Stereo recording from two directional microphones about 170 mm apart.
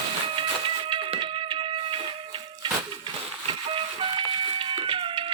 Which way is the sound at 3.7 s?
30° right (ahead or behind).